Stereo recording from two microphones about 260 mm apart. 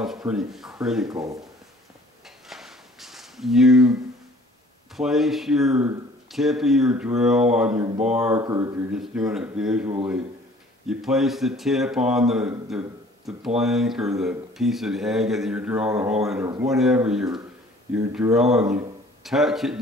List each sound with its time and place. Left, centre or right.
0.0 s speech: centre
1.0 s speech: centre
2.4 s a sound: centre
4.9 s speech: centre